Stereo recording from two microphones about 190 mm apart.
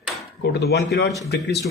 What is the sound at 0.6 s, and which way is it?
Speech, 60° left (ahead or behind).